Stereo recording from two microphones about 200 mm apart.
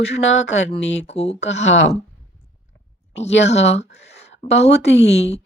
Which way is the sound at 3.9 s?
35° left (ahead or behind).